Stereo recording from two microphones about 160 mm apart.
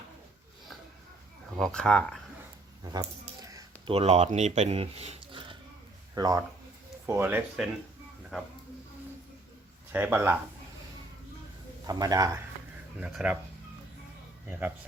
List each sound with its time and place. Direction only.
1.5 s speech: 5° left (ahead or behind)
2.9 s a sound: 25° right (ahead or behind)
3.8 s a man's voice: 40° right (ahead or behind)
7.1 s speech: 15° right (ahead or behind)
9.9 s speech: 10° right (ahead or behind)
11.9 s a man's voice: 20° right (ahead or behind)
13.0 s speech: 10° right (ahead or behind)